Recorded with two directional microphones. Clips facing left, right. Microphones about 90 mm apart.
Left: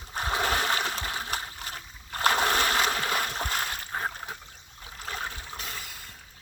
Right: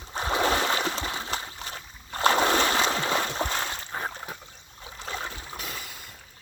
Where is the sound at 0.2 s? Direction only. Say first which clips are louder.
Right 3 dB; 25° right (ahead or behind).